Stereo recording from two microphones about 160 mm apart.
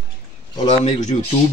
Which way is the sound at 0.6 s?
35° left (ahead or behind).